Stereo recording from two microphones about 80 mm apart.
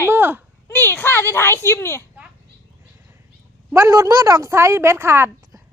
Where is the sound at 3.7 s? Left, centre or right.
Right.